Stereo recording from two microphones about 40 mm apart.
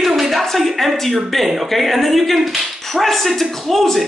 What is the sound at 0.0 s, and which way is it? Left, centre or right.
Speech, centre.